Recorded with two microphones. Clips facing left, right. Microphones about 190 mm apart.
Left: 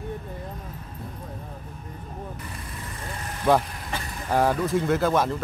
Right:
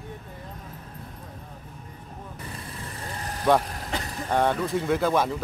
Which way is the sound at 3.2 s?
35° right (ahead or behind).